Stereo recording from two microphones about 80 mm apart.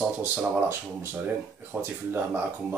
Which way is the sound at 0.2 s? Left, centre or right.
Right.